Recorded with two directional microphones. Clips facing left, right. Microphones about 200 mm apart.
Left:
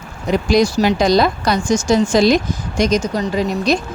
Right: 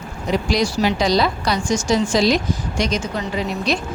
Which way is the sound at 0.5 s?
45° left (ahead or behind).